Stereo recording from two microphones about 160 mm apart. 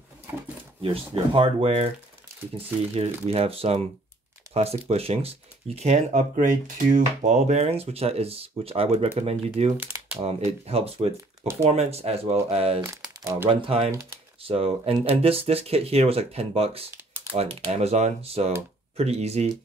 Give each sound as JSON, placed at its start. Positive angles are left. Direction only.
{"t": 0.8, "sound": "speech", "side_deg": -35}
{"t": 9.8, "sound": "typing", "side_deg": -10}
{"t": 10.2, "sound": "speech", "side_deg": -40}
{"t": 12.8, "sound": "speech", "side_deg": -20}
{"t": 13.5, "sound": "speech", "side_deg": -35}